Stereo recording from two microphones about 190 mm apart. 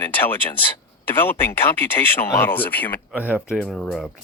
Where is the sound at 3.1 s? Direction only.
5° right (ahead or behind).